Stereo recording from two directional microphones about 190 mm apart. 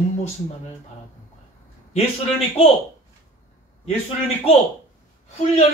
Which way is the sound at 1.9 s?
30° left (ahead or behind).